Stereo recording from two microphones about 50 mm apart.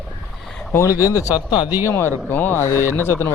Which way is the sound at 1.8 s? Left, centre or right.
Left.